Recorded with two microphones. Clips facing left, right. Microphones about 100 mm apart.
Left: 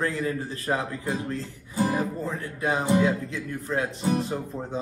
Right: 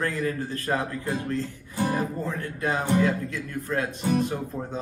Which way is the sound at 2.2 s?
20° left (ahead or behind).